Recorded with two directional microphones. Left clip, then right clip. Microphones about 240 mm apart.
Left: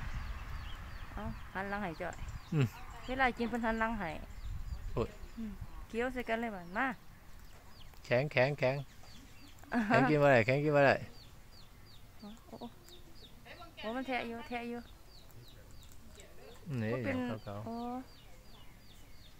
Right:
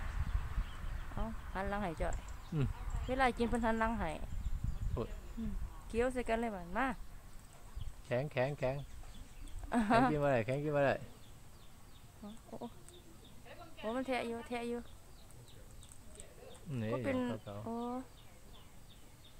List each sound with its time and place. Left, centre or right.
1.1 s speech: centre
5.0 s speech: left
5.9 s speech: centre
8.1 s speech: left
9.7 s speech: centre
10.1 s speech: left
12.2 s speech: centre
13.8 s speech: centre
16.7 s speech: left
17.0 s speech: centre